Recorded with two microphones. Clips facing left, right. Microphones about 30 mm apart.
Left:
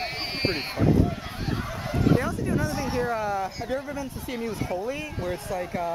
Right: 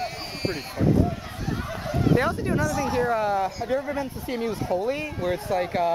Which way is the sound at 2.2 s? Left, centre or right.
Right.